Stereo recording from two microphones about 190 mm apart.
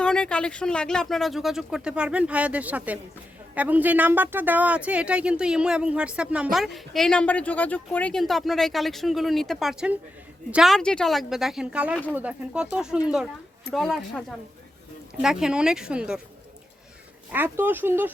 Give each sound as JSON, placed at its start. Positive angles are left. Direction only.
{"t": 0.0, "sound": "speech", "side_deg": 5}
{"t": 17.3, "sound": "speech", "side_deg": -10}